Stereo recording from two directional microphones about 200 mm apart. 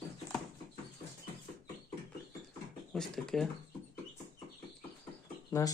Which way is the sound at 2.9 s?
5° left (ahead or behind).